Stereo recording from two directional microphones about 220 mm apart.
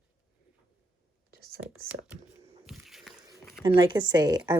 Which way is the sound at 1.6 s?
5° right (ahead or behind).